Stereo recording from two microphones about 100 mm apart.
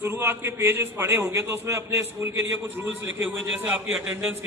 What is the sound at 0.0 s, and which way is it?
A man's voice, 25° right (ahead or behind).